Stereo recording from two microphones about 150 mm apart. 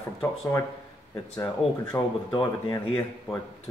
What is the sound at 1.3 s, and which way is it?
Speech, 25° left (ahead or behind).